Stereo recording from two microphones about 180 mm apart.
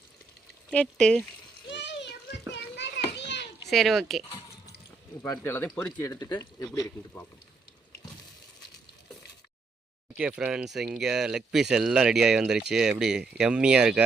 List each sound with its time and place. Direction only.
0.7 s speech: 5° left (ahead or behind)
1.7 s children playing: 75° left (ahead or behind)
3.7 s speech: centre (ahead or behind)
5.2 s speech: 15° left (ahead or behind)
6.7 s speech: 10° left (ahead or behind)
10.2 s speech: 5° right (ahead or behind)